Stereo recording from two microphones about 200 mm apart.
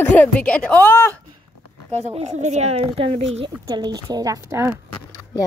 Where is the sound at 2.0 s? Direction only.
35° right (ahead or behind); by 4.7 s 15° right (ahead or behind).